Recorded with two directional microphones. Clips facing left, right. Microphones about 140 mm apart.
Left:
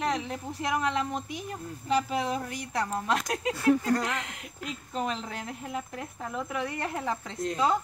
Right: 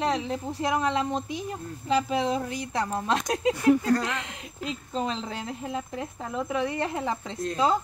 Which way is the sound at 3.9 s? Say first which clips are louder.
Right 3 dB; 20° left (ahead or behind).